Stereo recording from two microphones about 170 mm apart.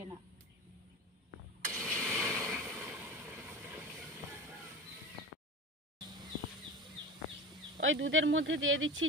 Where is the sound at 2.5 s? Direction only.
10° right (ahead or behind).